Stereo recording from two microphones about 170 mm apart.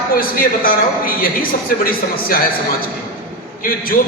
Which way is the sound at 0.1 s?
60° left (ahead or behind).